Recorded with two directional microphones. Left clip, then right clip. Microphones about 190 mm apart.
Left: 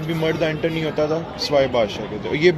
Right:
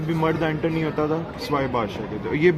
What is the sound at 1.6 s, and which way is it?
Speech, 20° right (ahead or behind).